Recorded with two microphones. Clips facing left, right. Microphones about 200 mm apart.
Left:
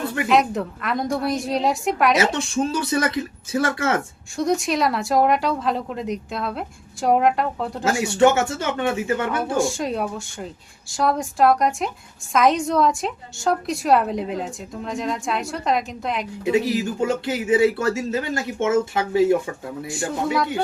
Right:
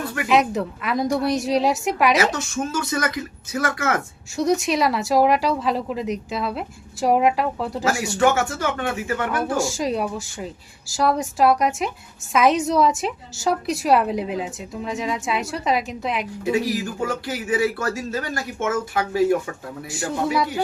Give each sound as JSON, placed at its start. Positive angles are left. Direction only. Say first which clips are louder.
{"t": 0.3, "sound": "a woman's voice", "louder": "right 1 dB", "side_deg": 0}
{"t": 2.1, "sound": "speech", "louder": "left 1 dB", "side_deg": 30}
{"t": 4.4, "sound": "a woman's voice", "louder": "right 1 dB", "side_deg": 0}
{"t": 7.9, "sound": "speech", "louder": "left 3 dB", "side_deg": 25}
{"t": 9.6, "sound": "a woman's voice", "louder": "left 1 dB", "side_deg": 0}
{"t": 16.4, "sound": "speech", "louder": "left 3 dB", "side_deg": 25}